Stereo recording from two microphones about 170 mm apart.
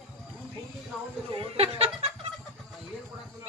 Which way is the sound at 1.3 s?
35° right (ahead or behind).